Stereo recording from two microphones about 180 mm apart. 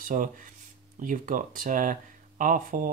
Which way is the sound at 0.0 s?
45° right (ahead or behind).